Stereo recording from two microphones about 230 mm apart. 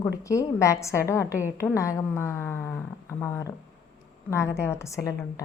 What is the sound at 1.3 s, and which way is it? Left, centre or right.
Speech, centre.